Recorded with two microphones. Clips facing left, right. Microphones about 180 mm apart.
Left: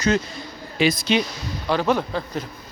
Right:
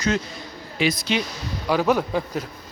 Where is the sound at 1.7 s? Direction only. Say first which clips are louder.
Right 1 dB; 5° right (ahead or behind).